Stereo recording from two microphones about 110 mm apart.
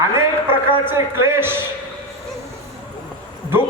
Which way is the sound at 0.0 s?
20° right (ahead or behind).